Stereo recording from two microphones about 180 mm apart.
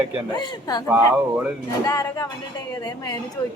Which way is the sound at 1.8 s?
20° left (ahead or behind).